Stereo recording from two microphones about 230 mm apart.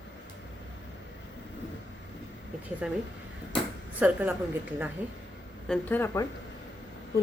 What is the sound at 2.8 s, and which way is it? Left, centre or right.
Speech, centre.